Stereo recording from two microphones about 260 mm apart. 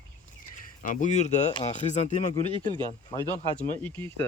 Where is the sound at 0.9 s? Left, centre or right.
Left.